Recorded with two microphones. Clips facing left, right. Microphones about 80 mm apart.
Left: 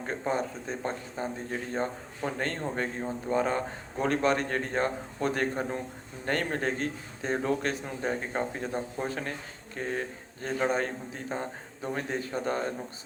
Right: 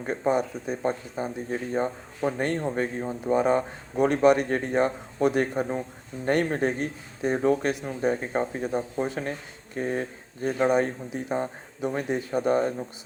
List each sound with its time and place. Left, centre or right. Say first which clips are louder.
0.0 s speech: right 5 dB; centre